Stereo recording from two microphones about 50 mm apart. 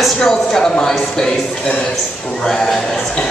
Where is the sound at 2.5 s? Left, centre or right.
Centre.